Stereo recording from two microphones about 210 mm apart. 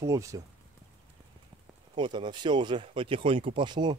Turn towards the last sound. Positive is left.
turn(degrees=-20)  # may be behind; listen again after turning